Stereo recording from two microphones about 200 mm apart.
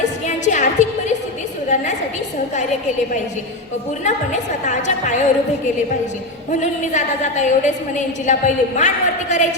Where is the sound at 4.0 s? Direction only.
35° left (ahead or behind).